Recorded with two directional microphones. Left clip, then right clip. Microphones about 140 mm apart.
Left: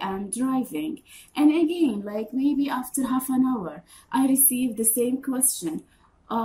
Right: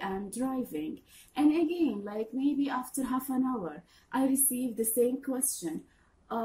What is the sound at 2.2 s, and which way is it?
Speech, 30° left (ahead or behind).